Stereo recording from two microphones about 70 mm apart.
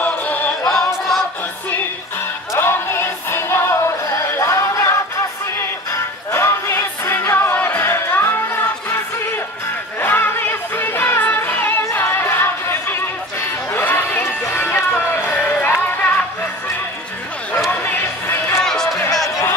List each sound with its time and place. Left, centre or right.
0.0 s a capella: left
0.7 s choir: centre
2.5 s music: left
9.9 s music: left
11.9 s chatter: left
14.4 s music: left
17.6 s music: left
18.6 s music: centre